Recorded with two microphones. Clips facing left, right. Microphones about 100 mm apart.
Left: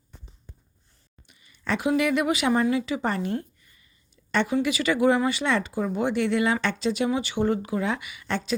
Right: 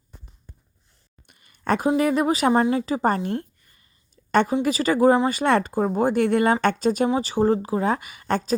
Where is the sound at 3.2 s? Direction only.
50° right (ahead or behind).